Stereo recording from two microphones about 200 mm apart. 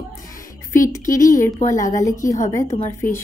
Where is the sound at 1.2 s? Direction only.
40° left (ahead or behind).